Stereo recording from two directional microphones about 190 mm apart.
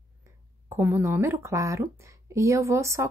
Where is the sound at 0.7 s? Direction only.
10° right (ahead or behind).